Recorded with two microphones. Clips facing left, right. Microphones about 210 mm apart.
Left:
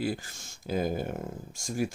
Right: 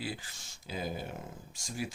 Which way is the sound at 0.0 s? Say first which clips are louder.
Left 8 dB; 45° left (ahead or behind).